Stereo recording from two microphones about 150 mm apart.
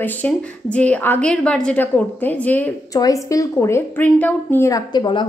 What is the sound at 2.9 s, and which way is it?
A woman's voice, 25° left (ahead or behind).